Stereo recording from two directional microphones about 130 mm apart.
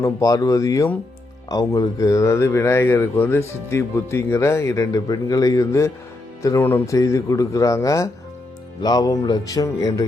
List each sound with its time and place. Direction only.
0.0 s speech: 25° left (ahead or behind)